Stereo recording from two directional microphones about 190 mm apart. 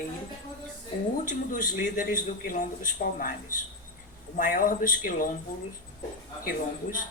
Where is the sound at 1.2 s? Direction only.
45° left (ahead or behind).